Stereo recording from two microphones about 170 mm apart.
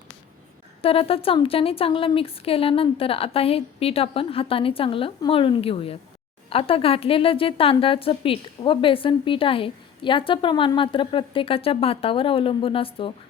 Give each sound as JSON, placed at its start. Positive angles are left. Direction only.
{"t": 0.8, "sound": "a woman's voice", "side_deg": 35}